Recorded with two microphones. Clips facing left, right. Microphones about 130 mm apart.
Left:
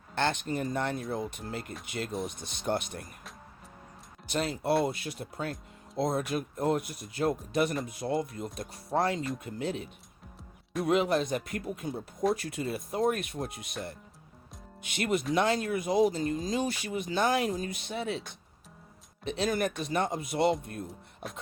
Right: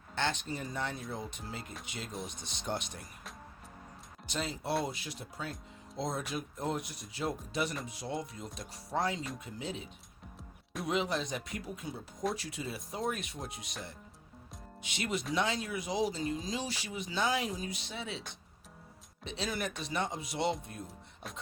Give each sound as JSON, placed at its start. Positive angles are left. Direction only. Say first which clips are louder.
{"t": 0.2, "sound": "speech", "louder": "left 5 dB", "side_deg": 55}
{"t": 4.3, "sound": "speech", "louder": "left 6 dB", "side_deg": 60}
{"t": 14.8, "sound": "speech", "louder": "left 6 dB", "side_deg": 55}
{"t": 19.2, "sound": "speech", "louder": "left 7 dB", "side_deg": 50}